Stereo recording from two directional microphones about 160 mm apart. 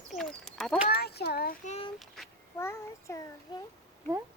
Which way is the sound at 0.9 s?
75° left (ahead or behind).